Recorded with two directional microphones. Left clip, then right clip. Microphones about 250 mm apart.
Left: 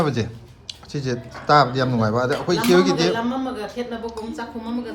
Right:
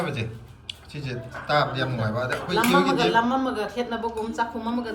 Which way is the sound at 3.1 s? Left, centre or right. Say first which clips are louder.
Right 3 dB; centre.